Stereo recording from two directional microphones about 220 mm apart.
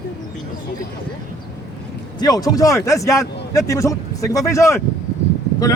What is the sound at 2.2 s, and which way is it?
A man's voice, 15° left (ahead or behind).